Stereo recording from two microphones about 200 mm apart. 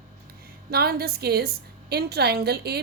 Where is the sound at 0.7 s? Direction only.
50° right (ahead or behind).